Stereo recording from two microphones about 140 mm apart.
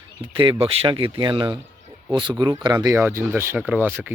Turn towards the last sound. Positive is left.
turn(degrees=-15)  # may be behind; listen again after turning